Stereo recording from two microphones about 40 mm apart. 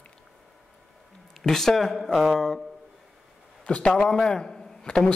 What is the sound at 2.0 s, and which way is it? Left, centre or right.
Speech, centre.